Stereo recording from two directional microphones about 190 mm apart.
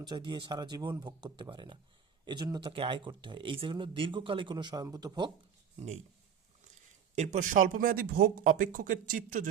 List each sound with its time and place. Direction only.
0.0 s speech: 25° right (ahead or behind)
5.7 s speech: 35° right (ahead or behind)
7.2 s speech: 40° right (ahead or behind)